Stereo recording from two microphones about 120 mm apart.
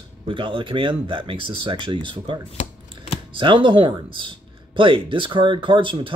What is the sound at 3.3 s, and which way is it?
Speech, 45° right (ahead or behind).